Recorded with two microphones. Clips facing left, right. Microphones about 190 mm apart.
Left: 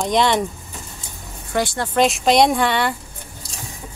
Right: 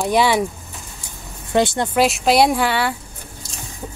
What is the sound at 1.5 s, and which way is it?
Speech, 25° right (ahead or behind).